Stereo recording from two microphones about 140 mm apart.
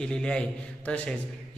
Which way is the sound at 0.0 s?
5° left (ahead or behind).